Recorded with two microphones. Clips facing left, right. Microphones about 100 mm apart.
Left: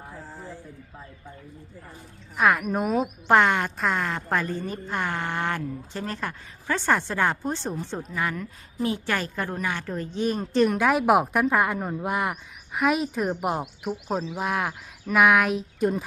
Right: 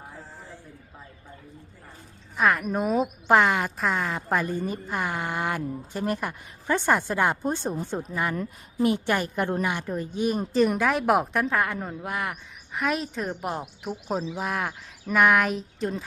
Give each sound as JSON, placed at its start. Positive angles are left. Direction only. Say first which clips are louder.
{"t": 2.3, "sound": "speech", "louder": "left 1 dB", "side_deg": 0}
{"t": 9.5, "sound": "a woman's voice", "louder": "right 3 dB", "side_deg": -25}
{"t": 9.7, "sound": "speech", "louder": "right 1 dB", "side_deg": -10}
{"t": 12.7, "sound": "speech", "louder": "left 4 dB", "side_deg": 5}
{"t": 13.4, "sound": "speech", "louder": "left 4 dB", "side_deg": 20}
{"t": 14.3, "sound": "speech", "louder": "left 2 dB", "side_deg": 0}